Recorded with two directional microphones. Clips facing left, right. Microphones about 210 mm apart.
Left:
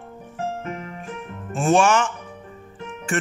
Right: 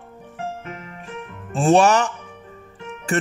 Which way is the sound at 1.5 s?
35° right (ahead or behind).